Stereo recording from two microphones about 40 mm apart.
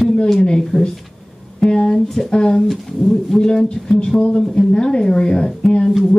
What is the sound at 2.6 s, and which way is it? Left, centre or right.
Speech, centre.